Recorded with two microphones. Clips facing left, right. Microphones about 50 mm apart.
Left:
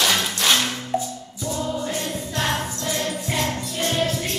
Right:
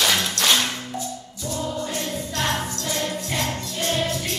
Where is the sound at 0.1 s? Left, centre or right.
Centre.